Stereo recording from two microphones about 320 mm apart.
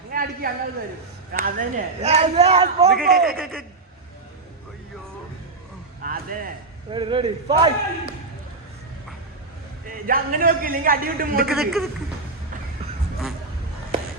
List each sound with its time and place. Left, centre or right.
0.1 s a sound: right
1.3 s a man's voice: right
2.9 s a man's voice: centre
6.0 s speech: right
6.9 s speech: centre
10.1 s a man's voice: right
11.4 s a man's voice: centre